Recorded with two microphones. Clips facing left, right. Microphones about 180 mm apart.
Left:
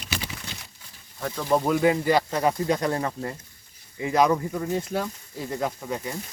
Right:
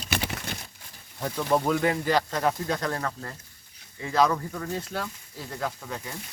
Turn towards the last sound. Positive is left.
turn(degrees=15)  # may be behind; listen again after turning